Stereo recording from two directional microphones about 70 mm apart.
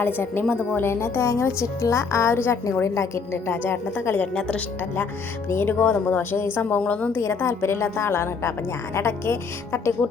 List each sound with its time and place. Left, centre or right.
0.0 s a woman's voice: left
0.9 s a woman's voice: left
2.8 s a woman's voice: left
3.3 s a woman's voice: left
4.4 s speech: centre
5.5 s a woman's voice: left
7.2 s a woman's voice: left